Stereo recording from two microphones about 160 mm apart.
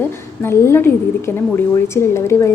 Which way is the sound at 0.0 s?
15° left (ahead or behind).